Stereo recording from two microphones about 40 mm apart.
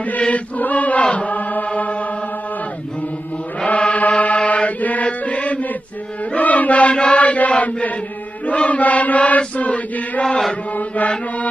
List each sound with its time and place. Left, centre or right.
0.3 s chant: left
3.6 s chant: left